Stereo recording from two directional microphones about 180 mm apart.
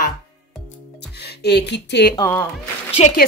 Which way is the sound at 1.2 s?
65° left (ahead or behind).